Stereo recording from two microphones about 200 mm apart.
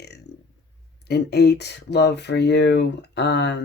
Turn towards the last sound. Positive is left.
turn(degrees=60)  # may be behind; listen again after turning